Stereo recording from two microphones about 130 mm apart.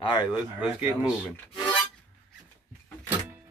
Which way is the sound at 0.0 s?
35° left (ahead or behind).